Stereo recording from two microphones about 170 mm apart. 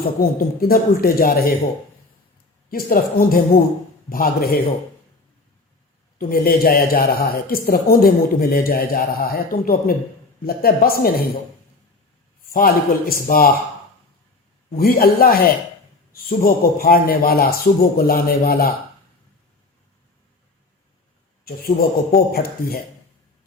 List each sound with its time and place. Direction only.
0.2 s a man's voice: 60° left (ahead or behind)
2.6 s a man's voice: 60° left (ahead or behind)
6.1 s a man's voice: 60° left (ahead or behind)
12.5 s a man's voice: 60° left (ahead or behind)
14.8 s a man's voice: 60° left (ahead or behind)
21.4 s a man's voice: 60° left (ahead or behind)